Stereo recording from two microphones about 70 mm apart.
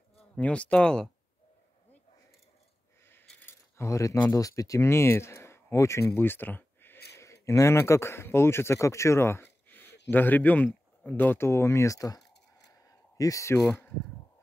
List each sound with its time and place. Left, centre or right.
0.4 s speech: centre
3.7 s a man's voice: left
11.4 s speech: left
12.8 s a sound: left